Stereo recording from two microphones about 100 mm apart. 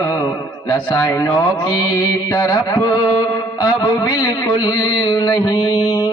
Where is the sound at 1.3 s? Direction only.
40° left (ahead or behind).